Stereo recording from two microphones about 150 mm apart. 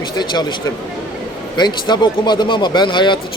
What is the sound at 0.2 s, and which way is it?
Speech, 30° left (ahead or behind).